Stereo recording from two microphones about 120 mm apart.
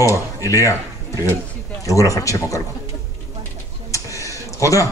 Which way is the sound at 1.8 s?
25° left (ahead or behind).